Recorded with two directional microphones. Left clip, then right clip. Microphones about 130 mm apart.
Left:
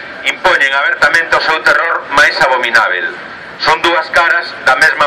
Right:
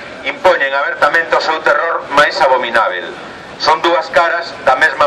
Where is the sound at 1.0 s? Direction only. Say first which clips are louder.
Right 1 dB; 10° right (ahead or behind).